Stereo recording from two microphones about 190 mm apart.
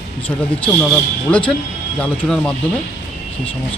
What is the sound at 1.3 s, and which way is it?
Speech, 5° left (ahead or behind).